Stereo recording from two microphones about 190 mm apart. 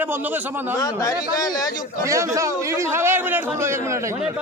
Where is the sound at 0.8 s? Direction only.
20° left (ahead or behind).